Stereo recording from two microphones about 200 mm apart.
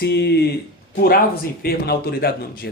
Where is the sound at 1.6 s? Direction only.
50° left (ahead or behind).